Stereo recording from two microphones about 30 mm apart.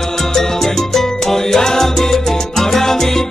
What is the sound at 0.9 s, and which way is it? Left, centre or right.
Salsa music, centre.